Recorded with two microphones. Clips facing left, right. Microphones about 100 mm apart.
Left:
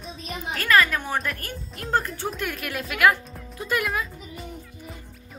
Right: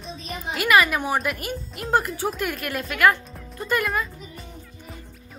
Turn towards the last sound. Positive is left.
turn(degrees=0)  # may be behind; listen again after turning